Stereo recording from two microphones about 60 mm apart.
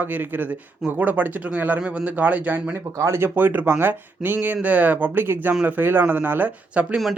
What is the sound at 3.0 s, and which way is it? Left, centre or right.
Speech, right.